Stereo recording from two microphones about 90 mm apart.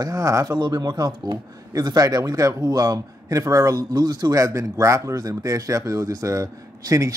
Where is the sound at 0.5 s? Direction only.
50° right (ahead or behind).